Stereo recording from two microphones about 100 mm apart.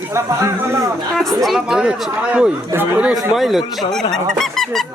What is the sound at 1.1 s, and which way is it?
Speech, centre (ahead or behind).